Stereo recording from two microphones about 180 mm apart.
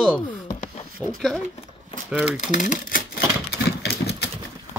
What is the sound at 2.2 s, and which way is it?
Speech, 40° left (ahead or behind).